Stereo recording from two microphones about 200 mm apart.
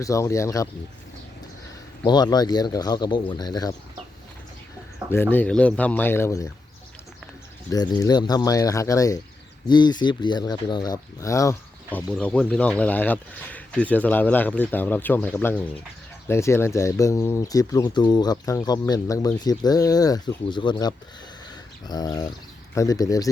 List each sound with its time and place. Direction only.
0.0 s speech: 15° left (ahead or behind)
2.0 s speech: 20° left (ahead or behind)
5.1 s speech: 10° left (ahead or behind)
7.7 s speech: 20° left (ahead or behind)